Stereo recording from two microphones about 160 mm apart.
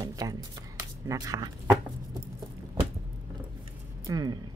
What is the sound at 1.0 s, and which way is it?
Speech, 20° right (ahead or behind).